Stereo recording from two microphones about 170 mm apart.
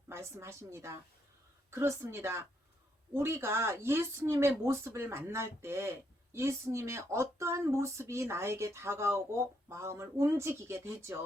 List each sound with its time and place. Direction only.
0.1 s speech: 15° right (ahead or behind)